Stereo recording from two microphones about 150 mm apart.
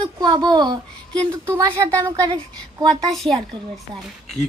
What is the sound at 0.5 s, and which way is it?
Speech, 25° right (ahead or behind).